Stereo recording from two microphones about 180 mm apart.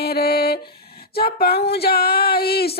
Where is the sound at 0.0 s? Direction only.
60° left (ahead or behind).